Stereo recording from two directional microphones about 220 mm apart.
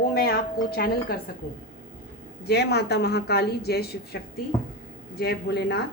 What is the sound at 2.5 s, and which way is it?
Speech, 50° left (ahead or behind).